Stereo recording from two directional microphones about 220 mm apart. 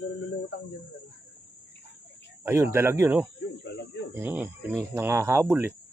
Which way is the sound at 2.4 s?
10° right (ahead or behind).